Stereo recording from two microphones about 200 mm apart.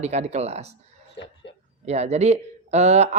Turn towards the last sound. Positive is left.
turn(degrees=-35)  # may be behind; listen again after turning